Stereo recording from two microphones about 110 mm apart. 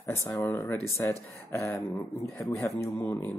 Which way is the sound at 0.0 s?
25° left (ahead or behind).